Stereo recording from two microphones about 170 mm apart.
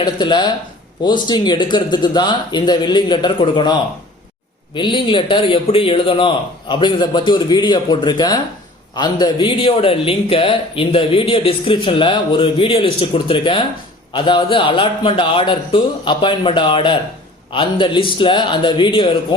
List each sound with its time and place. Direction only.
0.0 s a man's voice: 25° left (ahead or behind)